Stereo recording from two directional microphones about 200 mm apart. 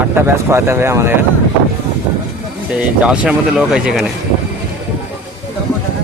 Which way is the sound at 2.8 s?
5° right (ahead or behind).